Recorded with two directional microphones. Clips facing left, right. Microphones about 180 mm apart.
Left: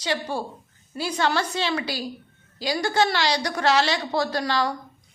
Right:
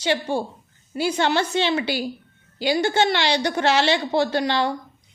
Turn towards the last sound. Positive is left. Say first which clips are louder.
# right 3 dB
turn(degrees=-25)  # may be behind; listen again after turning